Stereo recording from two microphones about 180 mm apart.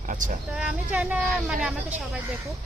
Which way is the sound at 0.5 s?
5° right (ahead or behind).